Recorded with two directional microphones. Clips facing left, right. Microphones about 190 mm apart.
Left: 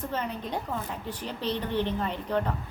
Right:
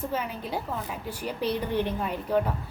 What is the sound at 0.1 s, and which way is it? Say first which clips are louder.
A woman's voice: right 1 dB; 10° right (ahead or behind).